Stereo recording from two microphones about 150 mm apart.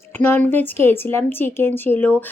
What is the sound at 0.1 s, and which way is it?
A woman's voice, 15° left (ahead or behind).